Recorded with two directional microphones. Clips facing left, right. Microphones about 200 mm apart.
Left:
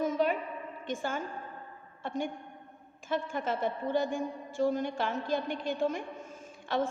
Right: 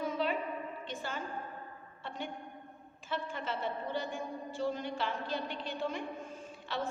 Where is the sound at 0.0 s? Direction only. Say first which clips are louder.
Left 5 dB; 45° left (ahead or behind).